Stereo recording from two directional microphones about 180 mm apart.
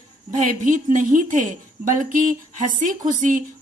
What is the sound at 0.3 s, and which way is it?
A woman's voice, 45° right (ahead or behind).